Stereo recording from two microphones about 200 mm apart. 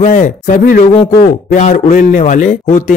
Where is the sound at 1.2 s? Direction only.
40° left (ahead or behind).